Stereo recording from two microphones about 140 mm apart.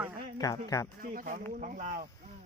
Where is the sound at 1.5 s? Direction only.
65° right (ahead or behind).